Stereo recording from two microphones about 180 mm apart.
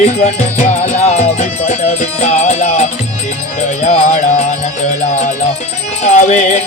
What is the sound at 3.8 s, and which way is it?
Music, 35° left (ahead or behind).